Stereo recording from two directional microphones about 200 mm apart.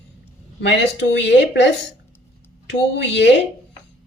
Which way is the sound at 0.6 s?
60° left (ahead or behind).